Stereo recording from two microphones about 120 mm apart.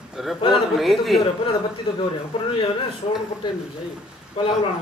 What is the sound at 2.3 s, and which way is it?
Speech, 45° left (ahead or behind).